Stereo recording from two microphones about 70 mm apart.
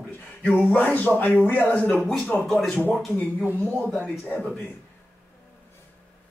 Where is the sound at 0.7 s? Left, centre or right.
Left.